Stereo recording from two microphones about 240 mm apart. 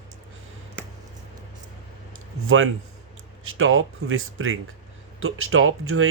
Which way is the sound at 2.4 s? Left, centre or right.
Right.